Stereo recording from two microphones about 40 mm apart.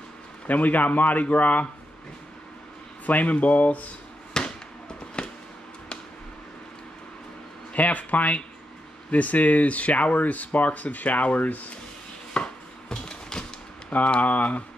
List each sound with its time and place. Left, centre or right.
0.5 s a man's voice: left
3.1 s speech: left
4.3 s fireworks: left
7.7 s speech: left
12.4 s chopping: left
13.1 s typewriter: centre
13.8 s speech: left